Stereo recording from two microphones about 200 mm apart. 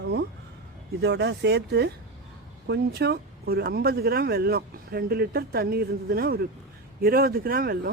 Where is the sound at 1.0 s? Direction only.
60° right (ahead or behind).